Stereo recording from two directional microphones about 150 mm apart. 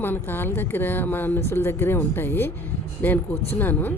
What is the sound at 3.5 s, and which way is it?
Speech, 10° left (ahead or behind).